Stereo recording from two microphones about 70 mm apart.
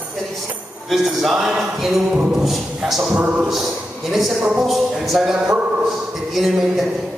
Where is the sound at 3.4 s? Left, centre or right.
Centre.